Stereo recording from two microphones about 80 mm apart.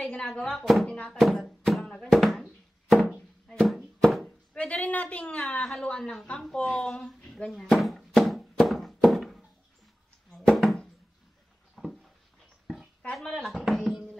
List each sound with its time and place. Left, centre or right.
0.0 s a woman's voice: centre
0.8 s a woman's voice: centre
1.2 s a sound: centre
4.6 s a woman's voice: centre
10.3 s music: centre
11.7 s a sound: centre
13.0 s a woman's voice: centre
13.7 s music: centre